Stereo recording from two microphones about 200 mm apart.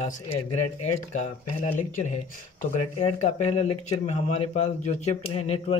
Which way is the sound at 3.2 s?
35° left (ahead or behind).